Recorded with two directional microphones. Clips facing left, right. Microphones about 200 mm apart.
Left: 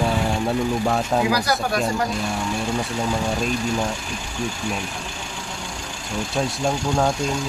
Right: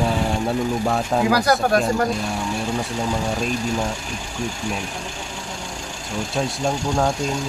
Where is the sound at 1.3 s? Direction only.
50° right (ahead or behind).